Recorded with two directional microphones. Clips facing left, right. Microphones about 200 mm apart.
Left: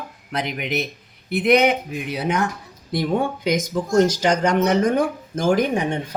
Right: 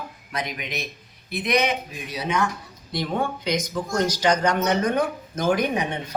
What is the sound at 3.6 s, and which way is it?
Speech, 45° left (ahead or behind).